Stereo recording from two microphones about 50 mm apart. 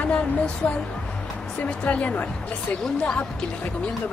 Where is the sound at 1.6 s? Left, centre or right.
Left.